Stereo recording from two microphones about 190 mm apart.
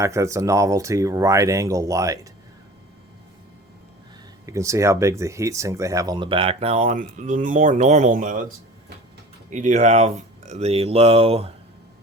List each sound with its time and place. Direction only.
0.0 s speech: 15° right (ahead or behind)
4.4 s speech: 15° right (ahead or behind); by 8.4 s 45° right (ahead or behind)
9.5 s speech: 40° right (ahead or behind)